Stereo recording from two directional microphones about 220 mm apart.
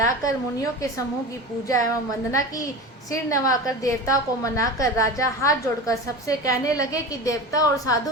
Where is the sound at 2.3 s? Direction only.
15° left (ahead or behind).